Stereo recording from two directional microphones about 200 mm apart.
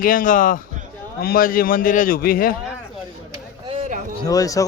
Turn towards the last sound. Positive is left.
turn(degrees=15)  # may be behind; listen again after turning